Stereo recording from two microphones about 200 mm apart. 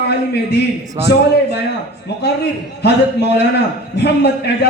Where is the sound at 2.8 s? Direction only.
55° left (ahead or behind).